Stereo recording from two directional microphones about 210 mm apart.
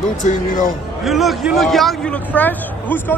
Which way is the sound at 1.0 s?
Centre (ahead or behind).